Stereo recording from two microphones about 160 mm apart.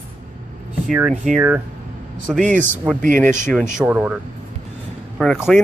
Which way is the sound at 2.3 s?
55° right (ahead or behind).